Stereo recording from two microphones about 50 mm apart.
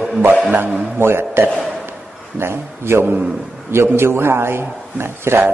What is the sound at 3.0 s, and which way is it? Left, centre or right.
Speech, right.